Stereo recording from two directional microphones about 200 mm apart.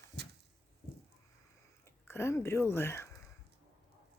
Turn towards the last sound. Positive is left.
turn(degrees=10)  # may be behind; listen again after turning